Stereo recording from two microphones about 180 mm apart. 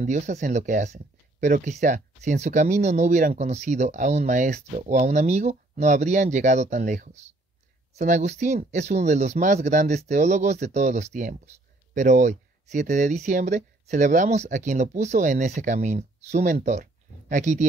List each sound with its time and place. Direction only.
0.0 s speech: 40° right (ahead or behind)